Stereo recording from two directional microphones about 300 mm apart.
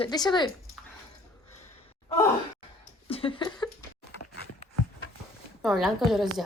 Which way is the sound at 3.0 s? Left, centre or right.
Centre.